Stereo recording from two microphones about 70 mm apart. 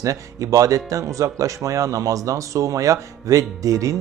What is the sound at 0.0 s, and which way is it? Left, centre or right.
Speech, right.